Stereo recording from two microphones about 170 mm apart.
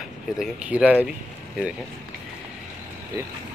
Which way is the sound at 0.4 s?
5° right (ahead or behind).